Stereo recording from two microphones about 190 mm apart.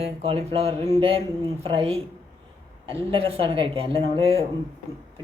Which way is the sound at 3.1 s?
30° right (ahead or behind).